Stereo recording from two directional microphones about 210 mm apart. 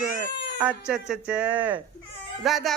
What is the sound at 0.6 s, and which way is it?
Speech, 5° right (ahead or behind).